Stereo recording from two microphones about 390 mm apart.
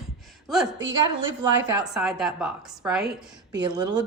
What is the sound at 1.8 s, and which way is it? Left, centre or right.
A woman's voice, centre.